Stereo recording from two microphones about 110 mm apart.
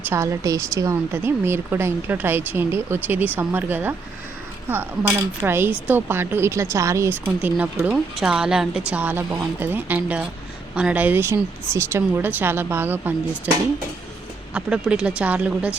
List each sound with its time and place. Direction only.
0.0 s a woman's voice: 25° right (ahead or behind)
7.3 s a woman's voice: 10° right (ahead or behind)
14.5 s a woman's voice: 10° right (ahead or behind)